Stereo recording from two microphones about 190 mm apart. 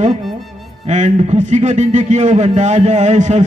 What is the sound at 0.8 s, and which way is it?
A man's voice, 40° right (ahead or behind).